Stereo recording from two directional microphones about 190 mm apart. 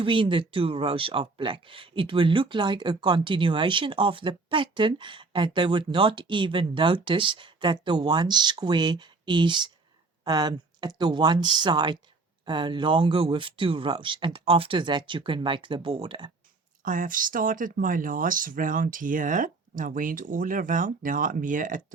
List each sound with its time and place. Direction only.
0.0 s speech: 25° right (ahead or behind)
16.8 s speech: 45° right (ahead or behind)